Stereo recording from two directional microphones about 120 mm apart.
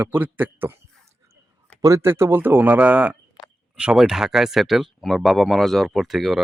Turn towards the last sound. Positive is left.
turn(degrees=0)  # may be behind; listen again after turning